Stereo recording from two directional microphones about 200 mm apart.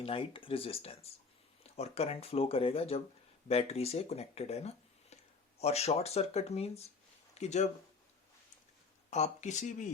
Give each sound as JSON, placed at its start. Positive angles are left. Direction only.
{"t": 0.0, "sound": "speech", "side_deg": 25}
{"t": 9.0, "sound": "speech", "side_deg": 35}